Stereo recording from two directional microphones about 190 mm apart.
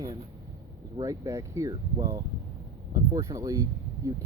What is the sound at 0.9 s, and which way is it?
Speech, 20° right (ahead or behind).